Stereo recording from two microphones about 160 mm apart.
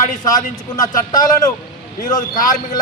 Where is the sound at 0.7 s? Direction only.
25° left (ahead or behind).